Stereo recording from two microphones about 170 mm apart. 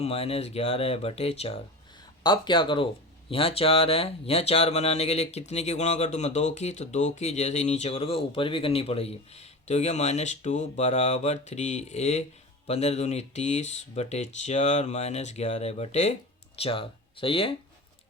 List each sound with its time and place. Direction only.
0.0 s speech: 35° left (ahead or behind)
2.2 s speech: 25° left (ahead or behind)